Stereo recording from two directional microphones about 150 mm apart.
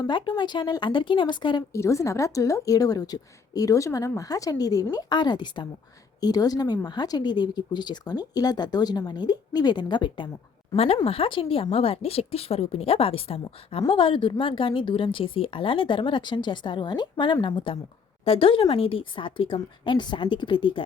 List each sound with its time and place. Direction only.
0.0 s a woman's voice: 30° left (ahead or behind)
1.7 s a woman's voice: 20° left (ahead or behind)
10.8 s a woman's voice: 40° left (ahead or behind)